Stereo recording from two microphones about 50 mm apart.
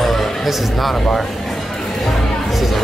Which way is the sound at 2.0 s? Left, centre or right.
Centre.